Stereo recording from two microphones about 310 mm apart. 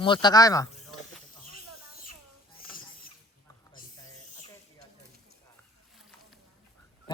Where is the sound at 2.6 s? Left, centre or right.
Left.